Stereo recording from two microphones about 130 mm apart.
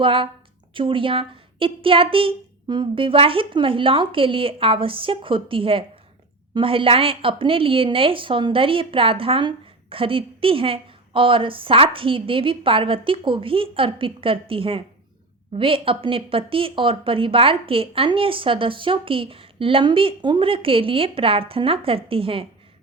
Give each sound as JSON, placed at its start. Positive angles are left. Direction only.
{"t": 0.0, "sound": "speech", "side_deg": -45}